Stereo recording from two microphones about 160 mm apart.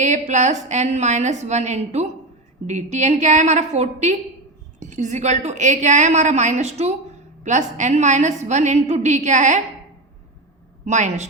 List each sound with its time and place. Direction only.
0.0 s a woman's voice: 45° right (ahead or behind)
10.8 s a woman's voice: 45° right (ahead or behind)